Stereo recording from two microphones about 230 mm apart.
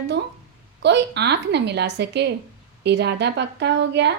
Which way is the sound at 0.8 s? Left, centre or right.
Right.